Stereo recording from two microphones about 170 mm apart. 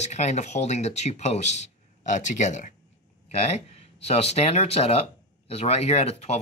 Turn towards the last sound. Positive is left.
turn(degrees=40)  # may be behind; listen again after turning